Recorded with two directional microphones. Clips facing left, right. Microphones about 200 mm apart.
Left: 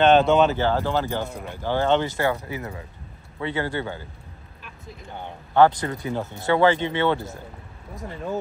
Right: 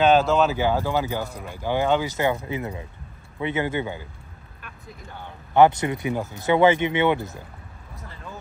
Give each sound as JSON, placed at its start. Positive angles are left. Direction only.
{"t": 0.0, "sound": "speech", "side_deg": -5}
{"t": 2.1, "sound": "speech", "side_deg": -20}
{"t": 5.5, "sound": "speech", "side_deg": -20}
{"t": 7.9, "sound": "speech", "side_deg": 20}